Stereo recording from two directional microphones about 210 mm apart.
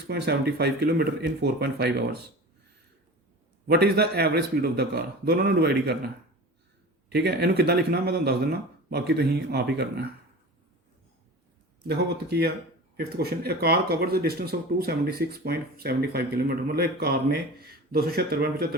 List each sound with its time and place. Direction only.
0.1 s speech: 50° right (ahead or behind)
3.7 s speech: 50° right (ahead or behind)
7.1 s speech: 50° right (ahead or behind)
11.8 s speech: 50° right (ahead or behind)